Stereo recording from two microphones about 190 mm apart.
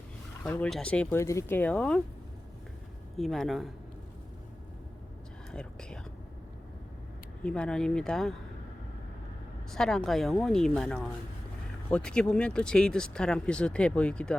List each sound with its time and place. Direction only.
0.4 s speech: 10° left (ahead or behind)
3.2 s speech: centre (ahead or behind)
5.5 s speech: 5° left (ahead or behind)
7.4 s speech: 5° left (ahead or behind)
9.7 s speech: centre (ahead or behind)